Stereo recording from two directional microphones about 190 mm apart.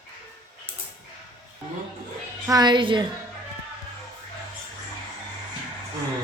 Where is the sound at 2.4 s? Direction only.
20° right (ahead or behind).